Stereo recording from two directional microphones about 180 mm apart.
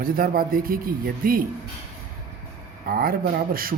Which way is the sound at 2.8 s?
55° right (ahead or behind).